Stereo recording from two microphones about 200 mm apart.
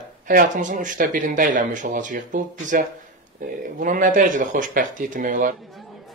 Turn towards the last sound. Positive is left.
turn(degrees=-40)  # may be behind; listen again after turning